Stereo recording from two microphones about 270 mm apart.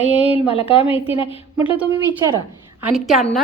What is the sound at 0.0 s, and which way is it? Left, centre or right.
A woman's voice, left.